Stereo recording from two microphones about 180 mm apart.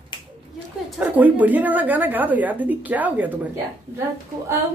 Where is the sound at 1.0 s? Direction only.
10° right (ahead or behind).